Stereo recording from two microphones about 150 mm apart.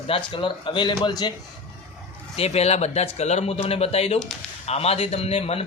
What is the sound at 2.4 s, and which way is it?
A man's voice, 45° left (ahead or behind).